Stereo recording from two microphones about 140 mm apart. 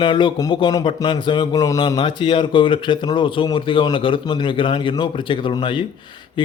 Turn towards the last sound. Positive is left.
turn(degrees=35)  # may be behind; listen again after turning